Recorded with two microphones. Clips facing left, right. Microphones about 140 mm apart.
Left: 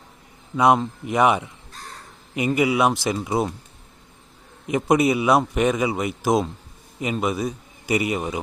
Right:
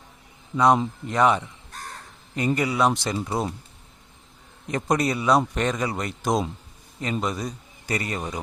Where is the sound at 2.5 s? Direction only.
10° left (ahead or behind).